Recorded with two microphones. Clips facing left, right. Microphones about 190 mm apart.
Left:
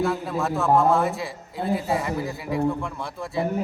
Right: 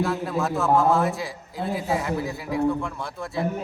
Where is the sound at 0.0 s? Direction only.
Centre (ahead or behind).